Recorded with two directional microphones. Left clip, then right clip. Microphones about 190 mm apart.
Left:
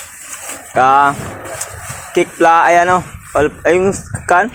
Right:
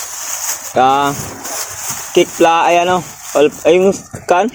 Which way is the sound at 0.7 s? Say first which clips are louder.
Left 2 dB; 20° right (ahead or behind).